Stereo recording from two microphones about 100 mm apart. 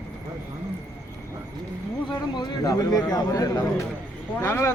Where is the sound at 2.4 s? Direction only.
40° left (ahead or behind).